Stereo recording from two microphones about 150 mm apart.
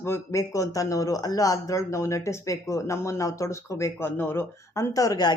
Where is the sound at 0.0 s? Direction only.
20° left (ahead or behind).